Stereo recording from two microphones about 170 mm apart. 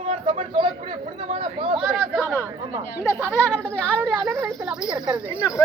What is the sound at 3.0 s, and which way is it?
Speech, 10° left (ahead or behind).